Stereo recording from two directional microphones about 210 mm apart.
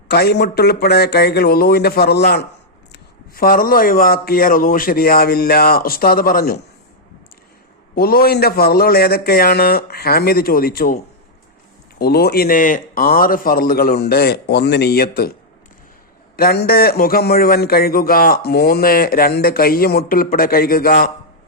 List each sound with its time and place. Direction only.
0.1 s speech: 50° left (ahead or behind)
7.9 s speech: 45° left (ahead or behind)
16.4 s speech: 45° left (ahead or behind)